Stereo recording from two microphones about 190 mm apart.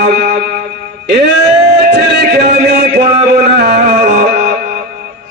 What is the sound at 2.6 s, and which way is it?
Music, 60° right (ahead or behind).